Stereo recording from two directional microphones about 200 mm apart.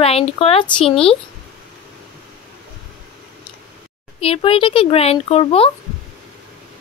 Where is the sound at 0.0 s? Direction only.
30° left (ahead or behind).